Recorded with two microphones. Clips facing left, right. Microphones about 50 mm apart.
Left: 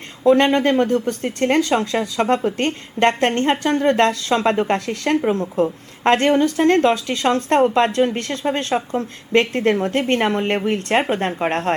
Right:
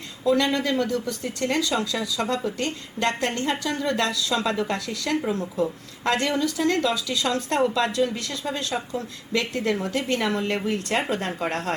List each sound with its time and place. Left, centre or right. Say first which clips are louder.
0.3 s speech: left 7 dB; left